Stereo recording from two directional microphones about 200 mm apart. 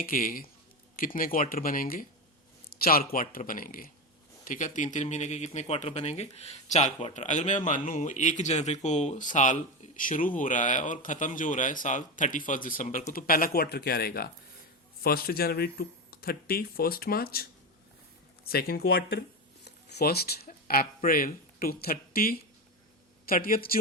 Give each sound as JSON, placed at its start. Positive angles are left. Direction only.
{"t": 0.0, "sound": "speech", "side_deg": 45}